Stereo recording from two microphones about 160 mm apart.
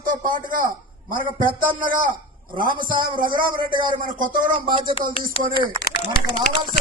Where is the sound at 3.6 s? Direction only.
30° right (ahead or behind).